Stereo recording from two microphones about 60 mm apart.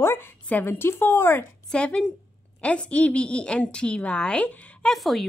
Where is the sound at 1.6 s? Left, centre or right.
Centre.